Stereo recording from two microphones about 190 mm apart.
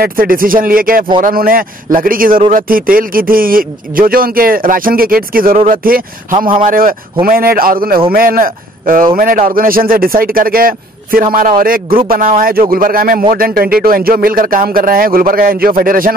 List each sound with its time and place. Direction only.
0.0 s a man's voice: 50° right (ahead or behind)